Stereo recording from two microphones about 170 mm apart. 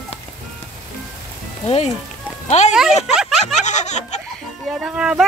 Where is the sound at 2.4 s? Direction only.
40° left (ahead or behind).